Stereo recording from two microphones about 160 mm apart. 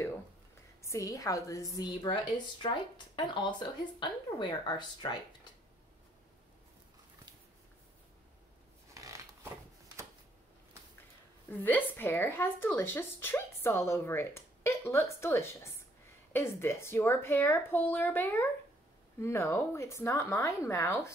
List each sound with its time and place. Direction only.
0.8 s speech: 20° left (ahead or behind)
8.9 s a sound: 20° right (ahead or behind)
11.6 s a woman's voice: 10° left (ahead or behind)